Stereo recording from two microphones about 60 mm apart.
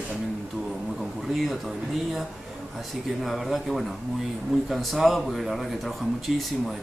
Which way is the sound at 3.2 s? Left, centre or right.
Centre.